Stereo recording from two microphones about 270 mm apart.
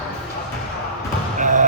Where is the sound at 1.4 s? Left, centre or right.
Right.